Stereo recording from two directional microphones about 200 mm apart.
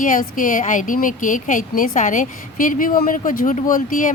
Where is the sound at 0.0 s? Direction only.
40° left (ahead or behind).